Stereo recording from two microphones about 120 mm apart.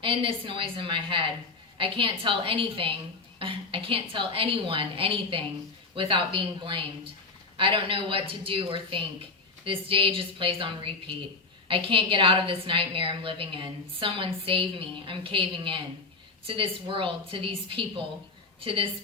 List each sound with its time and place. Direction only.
0.0 s a woman's voice: 45° right (ahead or behind)